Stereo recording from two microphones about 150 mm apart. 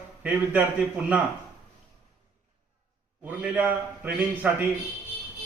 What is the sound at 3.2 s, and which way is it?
A man's voice, 10° right (ahead or behind).